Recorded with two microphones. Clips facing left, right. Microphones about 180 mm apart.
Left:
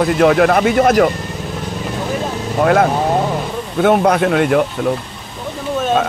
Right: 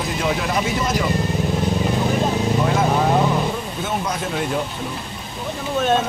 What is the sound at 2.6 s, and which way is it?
A man's voice, 65° left (ahead or behind).